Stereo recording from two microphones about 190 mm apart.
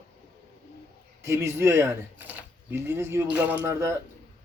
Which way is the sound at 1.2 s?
15° right (ahead or behind).